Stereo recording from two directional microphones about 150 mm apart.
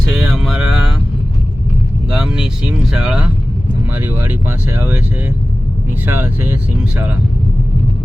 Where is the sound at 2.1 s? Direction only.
5° right (ahead or behind).